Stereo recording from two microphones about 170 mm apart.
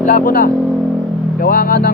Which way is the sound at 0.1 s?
55° left (ahead or behind).